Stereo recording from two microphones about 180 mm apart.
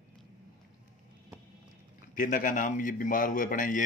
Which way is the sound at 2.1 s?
50° left (ahead or behind).